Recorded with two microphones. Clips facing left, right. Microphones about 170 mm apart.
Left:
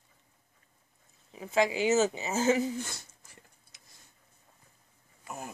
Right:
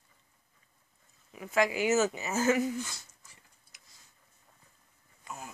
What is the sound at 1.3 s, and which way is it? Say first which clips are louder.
Speech: left 1 dB; 25° left (ahead or behind).